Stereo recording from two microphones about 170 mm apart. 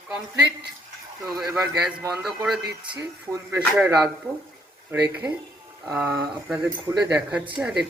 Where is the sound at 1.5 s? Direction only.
20° right (ahead or behind).